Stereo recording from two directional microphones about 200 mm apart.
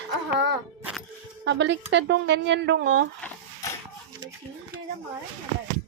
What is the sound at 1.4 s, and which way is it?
Speech, 60° right (ahead or behind).